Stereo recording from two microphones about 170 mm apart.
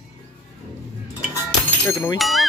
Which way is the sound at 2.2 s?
Centre (ahead or behind).